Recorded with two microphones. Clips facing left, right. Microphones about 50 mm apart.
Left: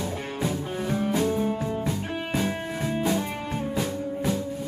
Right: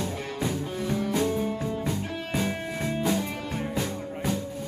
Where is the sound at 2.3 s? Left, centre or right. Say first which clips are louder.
Left 1 dB; centre.